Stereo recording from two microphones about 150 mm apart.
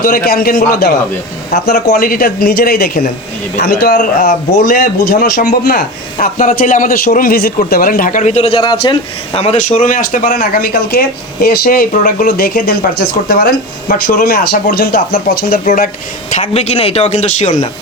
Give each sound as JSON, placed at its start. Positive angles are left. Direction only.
{"t": 0.0, "sound": "speech", "side_deg": 75}
{"t": 7.7, "sound": "speech", "side_deg": 70}
{"t": 8.6, "sound": "speech", "side_deg": 30}
{"t": 15.6, "sound": "speech", "side_deg": 60}
{"t": 16.4, "sound": "a man's voice", "side_deg": 45}